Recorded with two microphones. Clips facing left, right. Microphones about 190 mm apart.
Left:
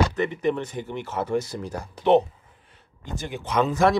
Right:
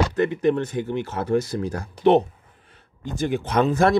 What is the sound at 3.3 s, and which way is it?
Speech, 60° right (ahead or behind).